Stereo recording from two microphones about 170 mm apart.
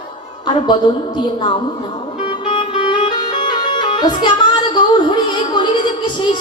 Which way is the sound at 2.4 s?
30° left (ahead or behind).